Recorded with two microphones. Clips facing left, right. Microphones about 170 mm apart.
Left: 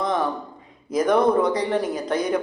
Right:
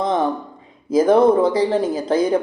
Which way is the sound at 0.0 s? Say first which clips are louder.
Right 4 dB; 30° right (ahead or behind).